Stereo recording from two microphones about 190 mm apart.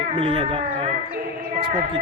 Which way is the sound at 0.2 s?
30° right (ahead or behind).